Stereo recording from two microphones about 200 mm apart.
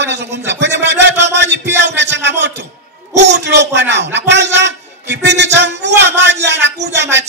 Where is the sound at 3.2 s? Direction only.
60° right (ahead or behind).